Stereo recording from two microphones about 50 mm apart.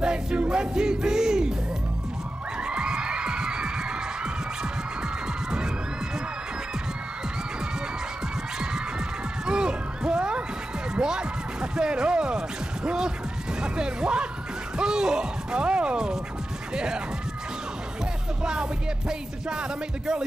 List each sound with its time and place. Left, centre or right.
0.0 s music: centre
2.6 s music: centre
9.5 s a sound: centre
11.0 s music: centre
13.6 s speech: centre
18.4 s speech: centre